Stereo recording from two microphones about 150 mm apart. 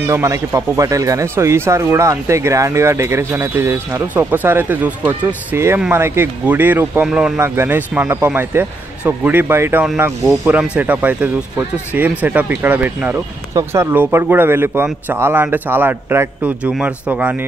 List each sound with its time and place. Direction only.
0.0 s speech: 20° right (ahead or behind)